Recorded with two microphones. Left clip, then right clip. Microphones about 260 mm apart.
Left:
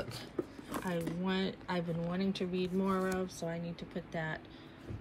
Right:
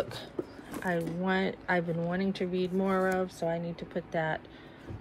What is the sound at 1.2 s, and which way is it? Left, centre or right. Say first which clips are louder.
Speech: right 6 dB; centre.